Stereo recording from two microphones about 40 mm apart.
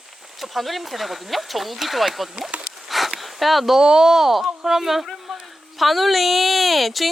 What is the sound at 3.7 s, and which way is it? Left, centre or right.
Speech, centre.